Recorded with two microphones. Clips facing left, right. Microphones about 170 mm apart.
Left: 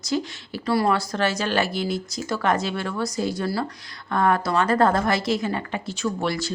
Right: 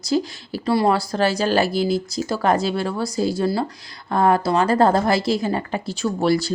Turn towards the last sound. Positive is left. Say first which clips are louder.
# right 6 dB
turn(degrees=-35)  # may be behind; listen again after turning